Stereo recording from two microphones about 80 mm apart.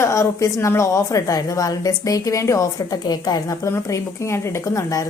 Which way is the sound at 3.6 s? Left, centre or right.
Left.